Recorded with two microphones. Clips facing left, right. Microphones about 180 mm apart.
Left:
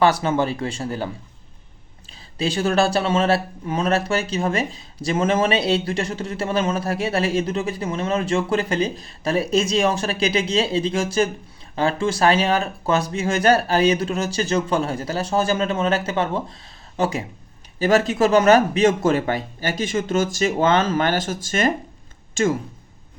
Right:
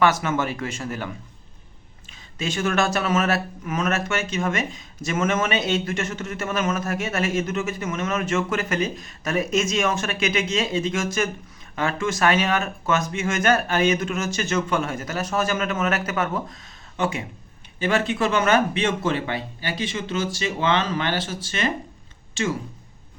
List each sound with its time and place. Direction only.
0.0 s speech: 30° left (ahead or behind); by 22.5 s 45° left (ahead or behind)